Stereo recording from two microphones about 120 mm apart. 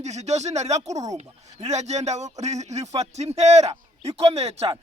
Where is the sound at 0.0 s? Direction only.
70° right (ahead or behind).